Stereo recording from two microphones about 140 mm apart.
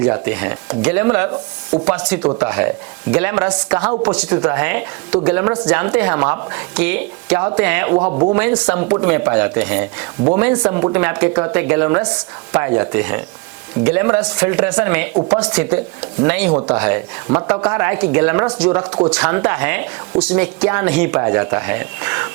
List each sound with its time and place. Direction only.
0.0 s speech: 10° right (ahead or behind)
7.9 s speech: 35° right (ahead or behind)
8.3 s speech: 10° right (ahead or behind)
17.2 s speech: 30° right (ahead or behind)
17.5 s speech: 10° right (ahead or behind)